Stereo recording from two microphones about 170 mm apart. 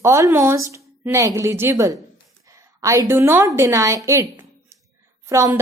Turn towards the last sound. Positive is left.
turn(degrees=-20)  # may be behind; listen again after turning